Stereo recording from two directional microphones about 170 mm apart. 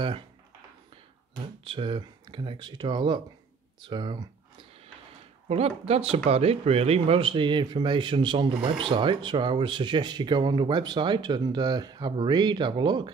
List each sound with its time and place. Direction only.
1.6 s speech: 30° right (ahead or behind)
3.8 s a sound: 30° right (ahead or behind)
5.5 s speech: 35° right (ahead or behind)